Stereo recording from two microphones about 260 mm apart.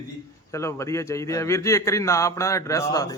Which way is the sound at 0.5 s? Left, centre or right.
Centre.